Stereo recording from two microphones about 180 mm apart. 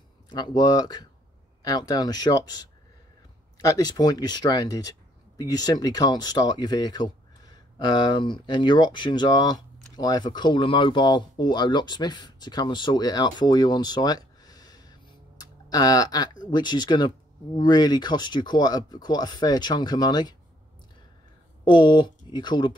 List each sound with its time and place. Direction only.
0.3 s speech: 25° left (ahead or behind)
21.6 s speech: 25° left (ahead or behind)